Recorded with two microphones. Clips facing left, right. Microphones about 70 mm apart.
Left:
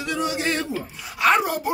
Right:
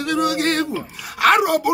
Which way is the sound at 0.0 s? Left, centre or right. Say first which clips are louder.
Right 5 dB; right.